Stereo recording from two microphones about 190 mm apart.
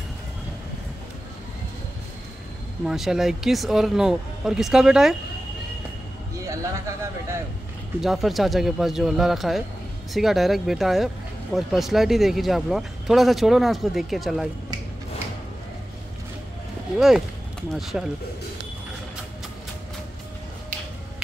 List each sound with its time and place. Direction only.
2.8 s speech: 5° right (ahead or behind)
6.4 s a man's voice: 15° right (ahead or behind)
8.0 s speech: centre (ahead or behind)
17.7 s speech: centre (ahead or behind)